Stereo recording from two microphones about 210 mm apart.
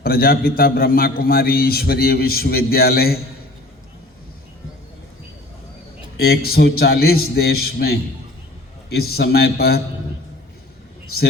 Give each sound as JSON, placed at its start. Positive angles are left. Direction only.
{"t": 0.0, "sound": "a man's voice", "side_deg": 45}
{"t": 6.1, "sound": "a man's voice", "side_deg": 50}